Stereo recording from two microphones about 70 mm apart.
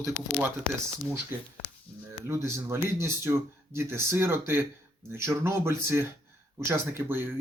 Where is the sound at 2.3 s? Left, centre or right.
Right.